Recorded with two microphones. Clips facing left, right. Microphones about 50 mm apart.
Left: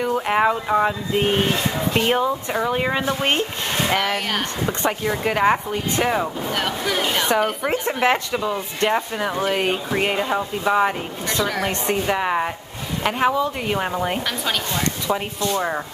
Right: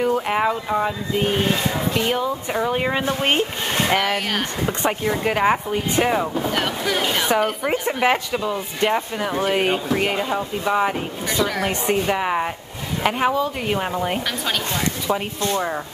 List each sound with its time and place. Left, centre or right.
0.0 s speech: centre
2.7 s a woman's voice: centre
9.8 s a woman's voice: centre